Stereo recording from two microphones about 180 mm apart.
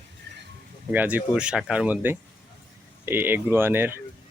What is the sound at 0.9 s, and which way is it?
Speech, 10° right (ahead or behind).